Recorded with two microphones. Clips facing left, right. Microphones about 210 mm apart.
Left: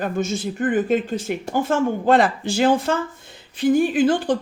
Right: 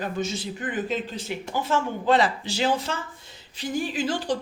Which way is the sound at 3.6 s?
55° left (ahead or behind).